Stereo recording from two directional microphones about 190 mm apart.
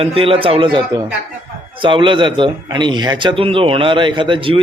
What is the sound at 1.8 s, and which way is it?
Speech, 25° right (ahead or behind).